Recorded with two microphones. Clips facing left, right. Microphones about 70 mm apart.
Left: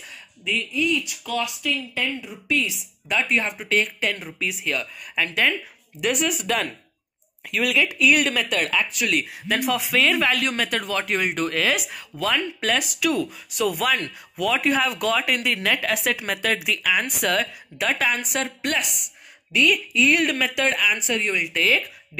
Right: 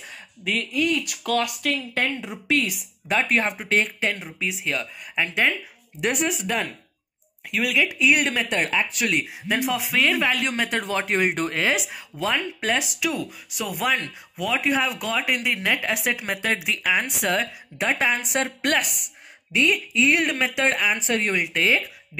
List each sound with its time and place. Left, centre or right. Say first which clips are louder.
0.5 s speech: even; right
1.0 s speech: right 3 dB; right
3.1 s speech: right 1 dB; right; by 5.5 s centre
5.9 s speech: left 1 dB; right
6.4 s speech: left 2 dB; centre
8.1 s speech: left 1 dB; right
9.2 s speech: even; centre
10.3 s speech: even; centre
13.1 s speech: left 5 dB; centre
13.7 s speech: left 1 dB; centre
14.4 s speech: left 2 dB; centre; by 18.4 s right
18.4 s speech: right 2 dB; right